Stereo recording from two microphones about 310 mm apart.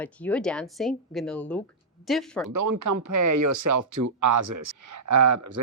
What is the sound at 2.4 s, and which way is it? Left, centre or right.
Speech, right.